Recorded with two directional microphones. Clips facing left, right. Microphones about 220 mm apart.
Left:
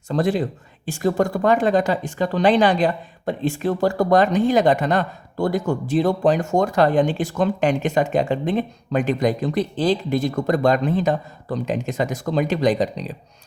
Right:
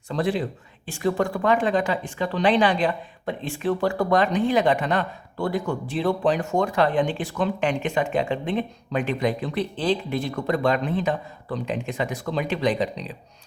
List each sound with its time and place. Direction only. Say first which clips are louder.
0.1 s speech: left 4 dB; 45° left (ahead or behind)